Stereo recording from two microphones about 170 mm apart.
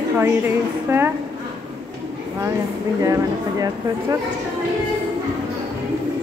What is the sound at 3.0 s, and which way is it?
Speech, 20° right (ahead or behind).